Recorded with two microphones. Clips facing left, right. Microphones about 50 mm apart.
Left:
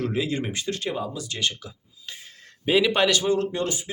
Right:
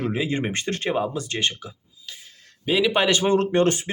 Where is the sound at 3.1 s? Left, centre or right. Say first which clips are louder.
Right 4 dB; right.